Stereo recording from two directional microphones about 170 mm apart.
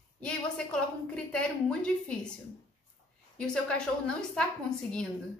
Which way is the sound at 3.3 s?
5° left (ahead or behind).